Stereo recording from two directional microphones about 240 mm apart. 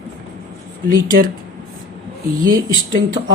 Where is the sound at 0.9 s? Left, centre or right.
Right.